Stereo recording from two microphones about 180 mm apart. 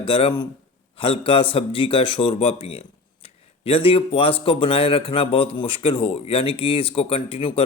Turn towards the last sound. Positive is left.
turn(degrees=30)  # may be behind; listen again after turning